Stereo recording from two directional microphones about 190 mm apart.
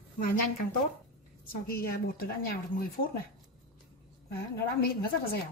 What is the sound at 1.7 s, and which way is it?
A woman's voice, 50° left (ahead or behind).